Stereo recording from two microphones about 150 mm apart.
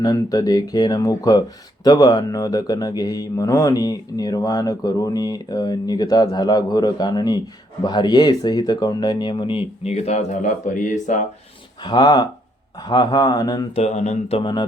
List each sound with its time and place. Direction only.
0.0 s speech: 25° left (ahead or behind); by 11.2 s 55° left (ahead or behind)
11.8 s speech: 30° left (ahead or behind)
13.7 s speech: 50° left (ahead or behind); by 14.7 s 30° left (ahead or behind)